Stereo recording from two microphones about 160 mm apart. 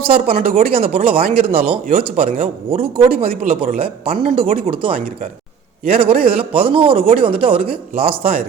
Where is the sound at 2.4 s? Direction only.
40° right (ahead or behind).